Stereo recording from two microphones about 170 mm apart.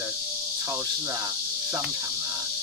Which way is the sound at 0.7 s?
15° right (ahead or behind).